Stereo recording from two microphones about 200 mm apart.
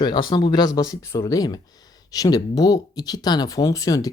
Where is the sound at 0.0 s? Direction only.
20° left (ahead or behind).